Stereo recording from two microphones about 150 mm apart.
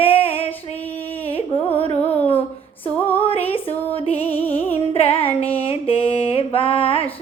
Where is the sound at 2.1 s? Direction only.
40° left (ahead or behind).